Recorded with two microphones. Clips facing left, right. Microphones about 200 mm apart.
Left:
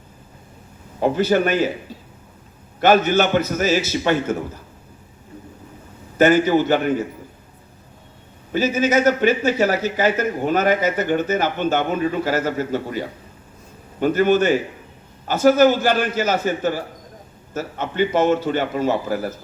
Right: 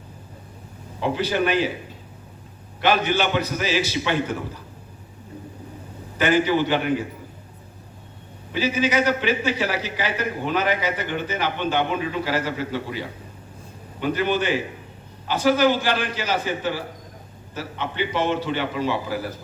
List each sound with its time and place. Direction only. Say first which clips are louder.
0.9 s a man's voice: left 5 dB; 45° left (ahead or behind)
2.8 s a man's voice: left 5 dB; 45° left (ahead or behind)
6.1 s a man's voice: left 5 dB; 45° left (ahead or behind)
8.5 s a man's voice: left 4 dB; 45° left (ahead or behind)